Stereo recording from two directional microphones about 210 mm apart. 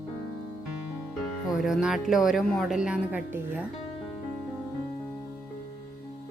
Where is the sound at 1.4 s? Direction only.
Centre (ahead or behind).